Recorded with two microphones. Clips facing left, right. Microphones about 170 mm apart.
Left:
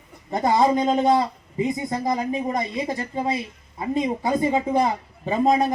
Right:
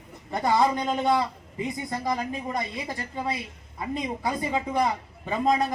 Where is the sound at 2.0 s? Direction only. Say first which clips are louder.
Left 5 dB; 20° left (ahead or behind).